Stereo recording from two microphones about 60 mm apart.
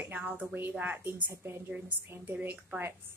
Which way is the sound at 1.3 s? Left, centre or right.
Right.